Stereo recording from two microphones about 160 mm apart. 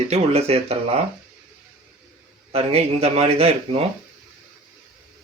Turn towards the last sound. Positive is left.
turn(degrees=-40)  # may be behind; listen again after turning